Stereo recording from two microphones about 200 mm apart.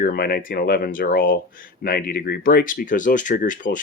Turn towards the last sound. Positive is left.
turn(degrees=40)  # may be behind; listen again after turning